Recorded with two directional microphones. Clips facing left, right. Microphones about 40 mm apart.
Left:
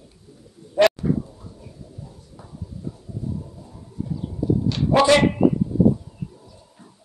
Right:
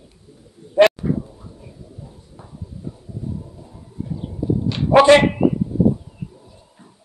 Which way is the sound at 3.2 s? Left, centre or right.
Right.